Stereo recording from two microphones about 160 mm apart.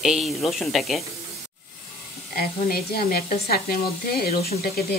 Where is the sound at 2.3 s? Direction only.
70° left (ahead or behind).